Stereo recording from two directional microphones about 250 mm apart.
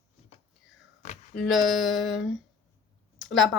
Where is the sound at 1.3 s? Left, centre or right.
Centre.